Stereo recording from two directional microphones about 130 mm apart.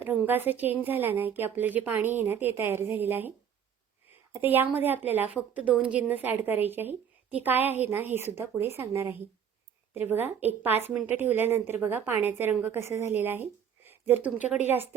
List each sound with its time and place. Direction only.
0.0 s a woman's voice: 15° right (ahead or behind)